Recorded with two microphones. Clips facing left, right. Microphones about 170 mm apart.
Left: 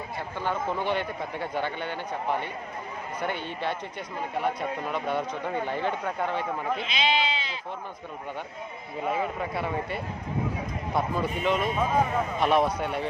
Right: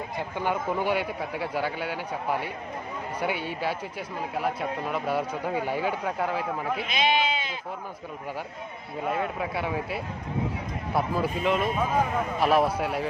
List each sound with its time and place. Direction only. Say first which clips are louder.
0.2 s a man's voice: right 2 dB; 15° right (ahead or behind)
6.8 s sheep: right 4 dB; 50° right (ahead or behind)
9.0 s speech: even; centre (ahead or behind)